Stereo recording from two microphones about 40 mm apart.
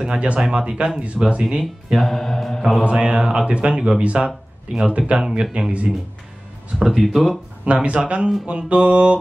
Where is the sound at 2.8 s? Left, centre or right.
Right.